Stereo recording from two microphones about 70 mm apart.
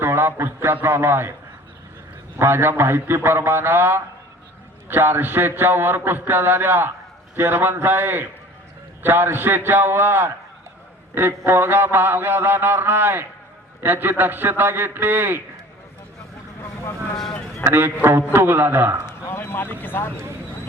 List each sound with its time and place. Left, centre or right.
0.0 s a man's voice: right
2.4 s a sound: right
7.3 s a man's voice: right
11.1 s a sound: right
17.6 s a man's voice: right
19.0 s speech: left